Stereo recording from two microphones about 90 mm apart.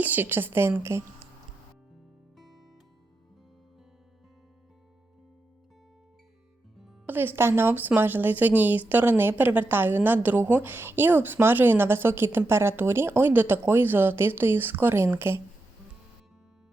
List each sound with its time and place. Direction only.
0.0 s a woman's voice: 20° right (ahead or behind)
2.4 s music: centre (ahead or behind)
7.1 s a woman's voice: 25° right (ahead or behind)